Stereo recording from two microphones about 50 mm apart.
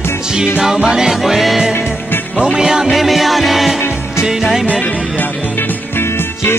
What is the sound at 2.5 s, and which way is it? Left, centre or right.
Music, centre.